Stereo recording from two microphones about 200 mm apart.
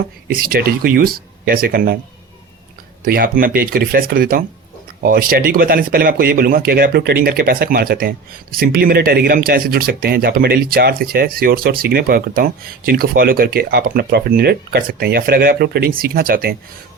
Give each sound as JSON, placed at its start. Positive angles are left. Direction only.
{"t": 0.3, "sound": "speech", "side_deg": -45}
{"t": 3.0, "sound": "speech", "side_deg": -45}